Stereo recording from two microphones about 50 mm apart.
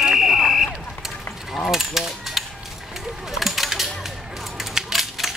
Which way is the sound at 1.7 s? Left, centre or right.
Centre.